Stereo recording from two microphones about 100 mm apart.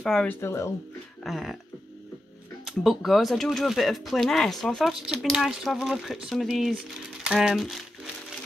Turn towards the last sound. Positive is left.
turn(degrees=0)  # may be behind; listen again after turning